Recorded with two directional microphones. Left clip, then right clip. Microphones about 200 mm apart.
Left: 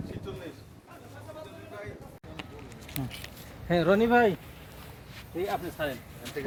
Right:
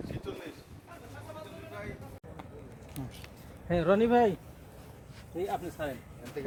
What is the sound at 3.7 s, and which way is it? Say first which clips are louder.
Speech: left 2 dB; 35° left (ahead or behind).